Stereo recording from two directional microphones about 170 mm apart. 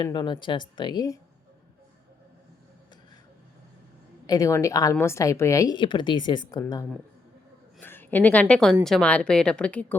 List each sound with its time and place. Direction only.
0.0 s a woman's voice: 25° left (ahead or behind)
4.3 s a woman's voice: 20° left (ahead or behind)